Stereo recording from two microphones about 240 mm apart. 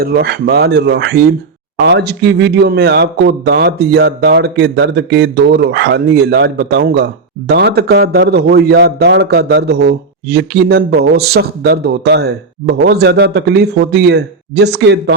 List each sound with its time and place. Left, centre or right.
0.0 s speech: right